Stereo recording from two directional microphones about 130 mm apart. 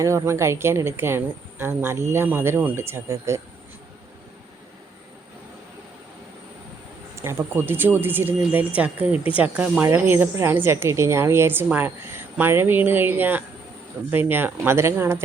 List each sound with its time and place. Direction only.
0.0 s speech: 25° right (ahead or behind)
7.2 s speech: 20° right (ahead or behind)